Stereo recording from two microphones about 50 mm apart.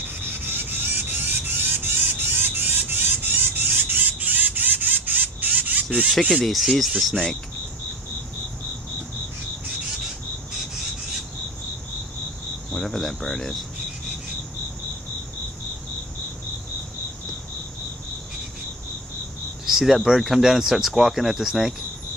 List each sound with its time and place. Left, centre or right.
0.1 s a sound: right
6.3 s speech: centre
12.7 s speech: centre
19.6 s speech: centre